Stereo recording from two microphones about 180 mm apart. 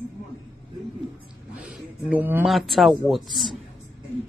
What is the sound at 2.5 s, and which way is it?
Speech, centre (ahead or behind).